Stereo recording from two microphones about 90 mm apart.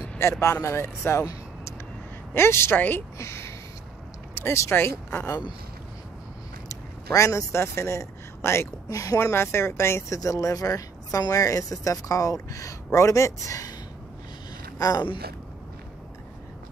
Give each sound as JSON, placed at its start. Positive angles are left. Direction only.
{"t": 0.2, "sound": "speech", "side_deg": 30}
{"t": 2.3, "sound": "speech", "side_deg": 30}
{"t": 7.1, "sound": "a man's voice", "side_deg": 35}